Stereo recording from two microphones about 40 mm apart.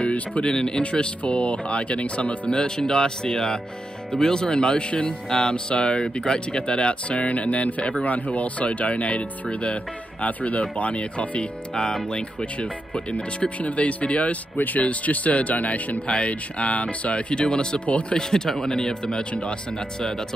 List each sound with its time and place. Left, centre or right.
0.1 s speech: left
0.5 s speech: left
2.5 s speech: centre